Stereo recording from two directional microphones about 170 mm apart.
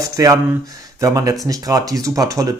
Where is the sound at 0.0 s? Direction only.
20° right (ahead or behind).